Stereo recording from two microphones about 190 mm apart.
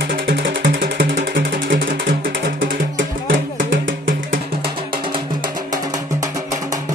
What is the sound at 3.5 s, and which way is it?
Music, 45° right (ahead or behind).